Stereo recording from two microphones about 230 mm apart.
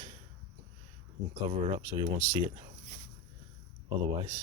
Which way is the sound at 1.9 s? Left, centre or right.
Centre.